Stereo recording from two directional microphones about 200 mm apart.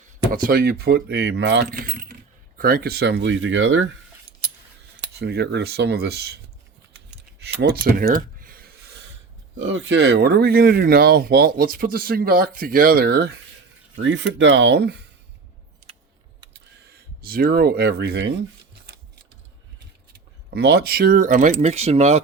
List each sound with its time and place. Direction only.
0.3 s speech: 50° right (ahead or behind)
1.7 s mechanisms: 45° right (ahead or behind)
2.6 s speech: 45° right (ahead or behind); by 3.8 s 70° right (ahead or behind)
5.2 s speech: 55° right (ahead or behind)
7.3 s a sound: 55° right (ahead or behind)
7.9 s a sound: 45° right (ahead or behind)
9.6 s speech: 65° right (ahead or behind)
13.9 s speech: 70° right (ahead or behind)
16.8 s speech: 50° right (ahead or behind)
20.5 s speech: 55° right (ahead or behind); by 22.2 s 30° right (ahead or behind)